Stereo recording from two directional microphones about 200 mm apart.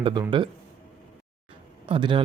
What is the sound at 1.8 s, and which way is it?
Speech, 25° right (ahead or behind).